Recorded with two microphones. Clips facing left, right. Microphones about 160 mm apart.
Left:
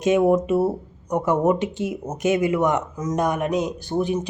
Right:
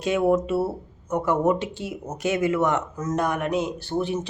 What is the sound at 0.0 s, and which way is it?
Speech, 15° left (ahead or behind).